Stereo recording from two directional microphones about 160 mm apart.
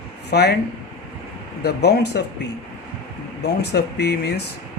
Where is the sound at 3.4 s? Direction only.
90° left.